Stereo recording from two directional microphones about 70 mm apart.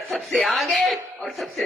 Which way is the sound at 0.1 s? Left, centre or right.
Centre.